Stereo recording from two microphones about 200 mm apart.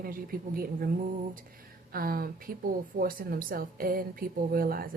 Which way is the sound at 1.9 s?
45° right (ahead or behind).